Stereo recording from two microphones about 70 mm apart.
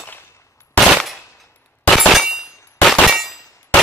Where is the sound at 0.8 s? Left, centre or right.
Centre.